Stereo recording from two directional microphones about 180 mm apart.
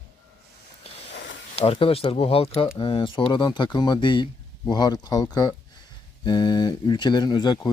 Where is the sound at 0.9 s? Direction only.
35° left (ahead or behind).